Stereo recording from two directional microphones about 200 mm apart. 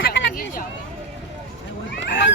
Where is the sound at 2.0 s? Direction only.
65° left (ahead or behind).